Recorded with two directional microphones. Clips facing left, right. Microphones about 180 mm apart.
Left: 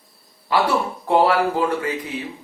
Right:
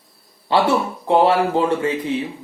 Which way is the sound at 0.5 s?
25° right (ahead or behind).